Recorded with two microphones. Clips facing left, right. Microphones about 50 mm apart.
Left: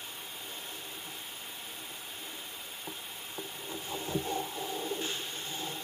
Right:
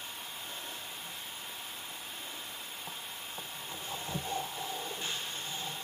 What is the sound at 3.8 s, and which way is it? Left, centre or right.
Heart murmur, centre.